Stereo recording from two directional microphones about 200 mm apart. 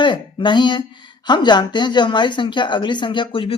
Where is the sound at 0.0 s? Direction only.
25° left (ahead or behind).